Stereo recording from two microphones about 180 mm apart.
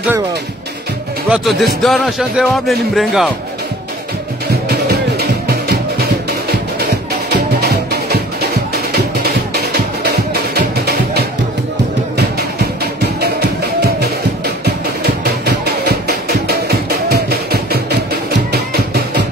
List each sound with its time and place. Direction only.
1.3 s speech: centre (ahead or behind)
5.5 s music: 60° right (ahead or behind)
13.0 s music: 65° right (ahead or behind)